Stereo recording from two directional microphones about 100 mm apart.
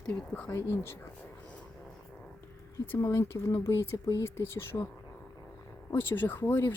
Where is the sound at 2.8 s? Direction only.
25° left (ahead or behind).